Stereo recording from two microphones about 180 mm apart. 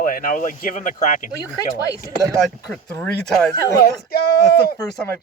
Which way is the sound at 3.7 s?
60° left (ahead or behind).